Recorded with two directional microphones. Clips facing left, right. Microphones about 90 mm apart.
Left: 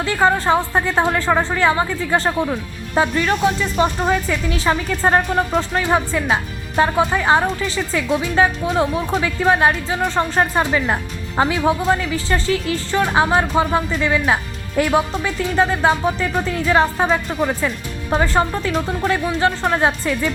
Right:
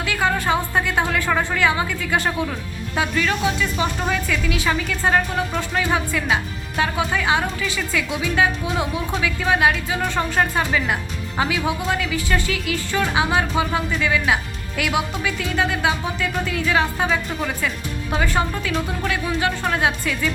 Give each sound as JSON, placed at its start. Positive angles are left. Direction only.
{"t": 0.0, "sound": "a woman's voice", "side_deg": 35}